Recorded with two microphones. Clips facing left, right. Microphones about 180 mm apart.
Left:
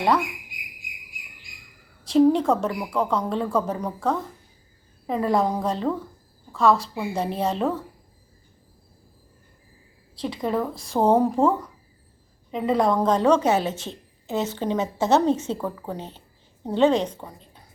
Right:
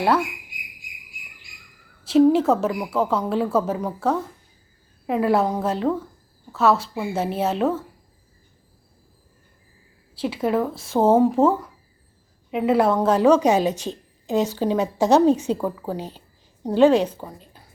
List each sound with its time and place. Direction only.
2.0 s a woman's voice: 5° right (ahead or behind)
10.2 s a woman's voice: 5° right (ahead or behind)